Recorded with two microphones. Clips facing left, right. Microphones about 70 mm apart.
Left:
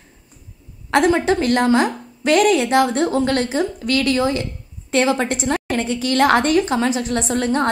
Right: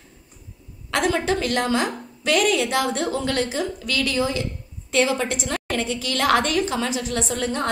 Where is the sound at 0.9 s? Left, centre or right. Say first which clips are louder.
Left 6 dB; left.